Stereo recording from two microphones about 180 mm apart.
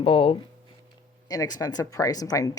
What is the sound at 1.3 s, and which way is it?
Speech, 20° left (ahead or behind).